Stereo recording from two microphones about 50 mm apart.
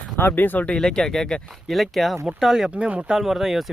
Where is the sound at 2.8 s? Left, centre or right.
Right.